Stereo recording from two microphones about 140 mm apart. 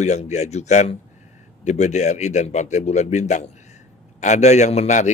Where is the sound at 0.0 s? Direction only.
55° left (ahead or behind).